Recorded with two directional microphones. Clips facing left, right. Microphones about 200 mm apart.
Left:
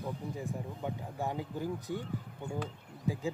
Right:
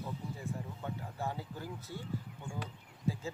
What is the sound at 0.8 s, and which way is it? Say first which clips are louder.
Speech: left 3 dB; 15° left (ahead or behind).